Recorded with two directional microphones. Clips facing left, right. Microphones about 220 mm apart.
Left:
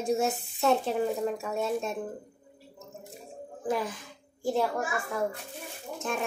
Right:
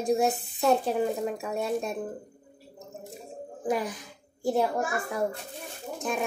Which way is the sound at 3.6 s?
15° right (ahead or behind).